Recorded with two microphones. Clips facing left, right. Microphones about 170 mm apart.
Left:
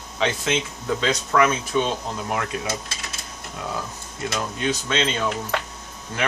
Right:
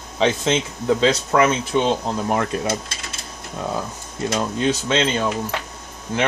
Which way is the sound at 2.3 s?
40° right (ahead or behind).